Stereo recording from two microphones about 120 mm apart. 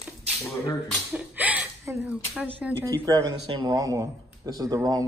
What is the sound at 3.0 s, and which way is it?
Speech, 30° right (ahead or behind).